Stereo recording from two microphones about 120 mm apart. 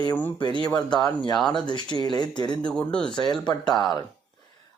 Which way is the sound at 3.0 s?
40° left (ahead or behind).